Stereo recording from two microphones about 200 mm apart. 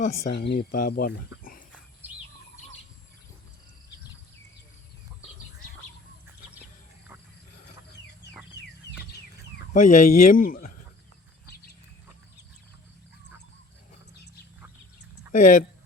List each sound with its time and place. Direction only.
0.3 s speech: 55° left (ahead or behind)
2.0 s chirp: 10° right (ahead or behind)
9.7 s speech: 40° left (ahead or behind)
15.3 s speech: 40° left (ahead or behind)